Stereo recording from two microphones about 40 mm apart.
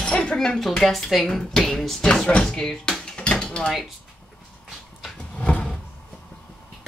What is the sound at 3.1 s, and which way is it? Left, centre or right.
Mechanisms, left.